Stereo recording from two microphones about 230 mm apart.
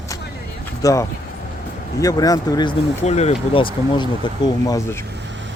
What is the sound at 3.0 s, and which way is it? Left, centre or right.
Speech, left.